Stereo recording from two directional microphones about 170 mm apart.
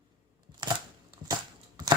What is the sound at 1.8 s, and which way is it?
Horse, 25° right (ahead or behind).